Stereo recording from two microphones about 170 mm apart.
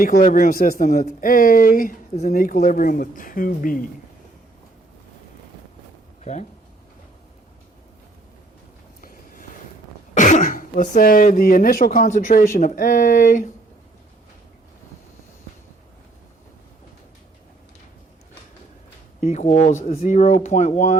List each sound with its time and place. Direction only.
0.0 s speech: 55° left (ahead or behind)
10.2 s speech: 45° left (ahead or behind)
19.2 s speech: 45° left (ahead or behind)